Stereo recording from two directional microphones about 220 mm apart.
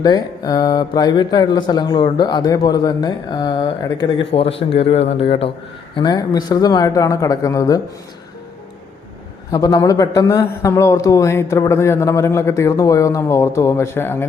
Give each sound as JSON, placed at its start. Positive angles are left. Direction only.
{"t": 0.0, "sound": "speech", "side_deg": 20}
{"t": 6.0, "sound": "a man's voice", "side_deg": 20}
{"t": 9.5, "sound": "a man's voice", "side_deg": 15}